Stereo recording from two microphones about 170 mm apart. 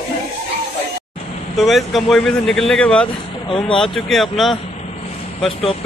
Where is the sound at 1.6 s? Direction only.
Centre (ahead or behind).